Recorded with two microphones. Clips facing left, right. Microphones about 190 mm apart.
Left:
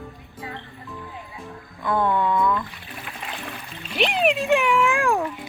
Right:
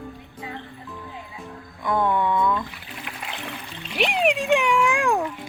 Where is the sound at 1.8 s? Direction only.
15° right (ahead or behind).